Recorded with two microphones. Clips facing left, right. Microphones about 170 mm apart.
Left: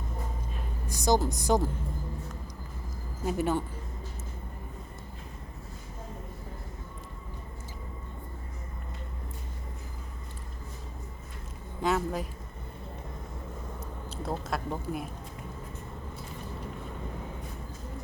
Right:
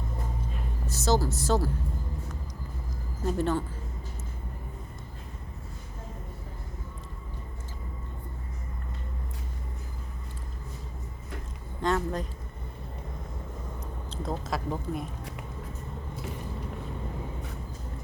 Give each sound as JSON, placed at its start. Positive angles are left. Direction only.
{"t": 0.9, "sound": "a woman's voice", "side_deg": 15}
{"t": 3.2, "sound": "a woman's voice", "side_deg": 10}
{"t": 11.8, "sound": "a woman's voice", "side_deg": 5}
{"t": 14.2, "sound": "speech", "side_deg": 0}